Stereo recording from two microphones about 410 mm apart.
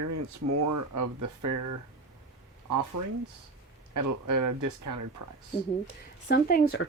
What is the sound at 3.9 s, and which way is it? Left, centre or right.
Speech, right.